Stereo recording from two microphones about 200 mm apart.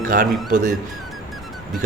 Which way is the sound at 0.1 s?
45° right (ahead or behind).